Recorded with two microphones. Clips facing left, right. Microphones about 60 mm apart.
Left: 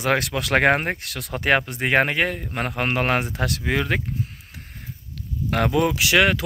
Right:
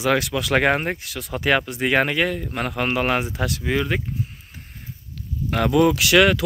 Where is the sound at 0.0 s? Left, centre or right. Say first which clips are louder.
Right 1 dB; left.